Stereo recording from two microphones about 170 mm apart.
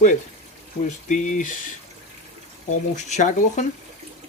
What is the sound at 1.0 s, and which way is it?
Speech, 50° left (ahead or behind).